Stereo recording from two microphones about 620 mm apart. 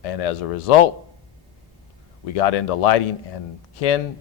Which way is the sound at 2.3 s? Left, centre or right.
Left.